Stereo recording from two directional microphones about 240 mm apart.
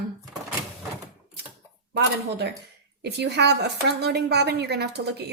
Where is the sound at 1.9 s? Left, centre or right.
Right.